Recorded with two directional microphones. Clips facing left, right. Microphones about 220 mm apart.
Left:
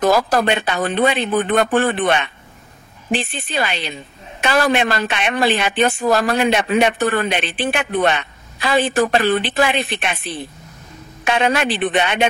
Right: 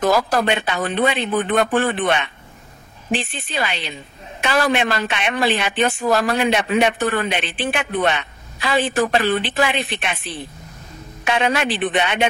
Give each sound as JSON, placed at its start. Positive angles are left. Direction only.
{"t": 0.0, "sound": "speech", "side_deg": 40}
{"t": 4.4, "sound": "a woman's voice", "side_deg": 40}
{"t": 11.2, "sound": "a woman's voice", "side_deg": 45}